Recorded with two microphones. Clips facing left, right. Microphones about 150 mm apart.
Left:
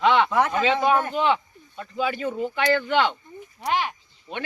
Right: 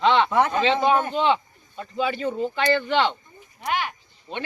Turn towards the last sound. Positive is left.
turn(degrees=0)  # may be behind; listen again after turning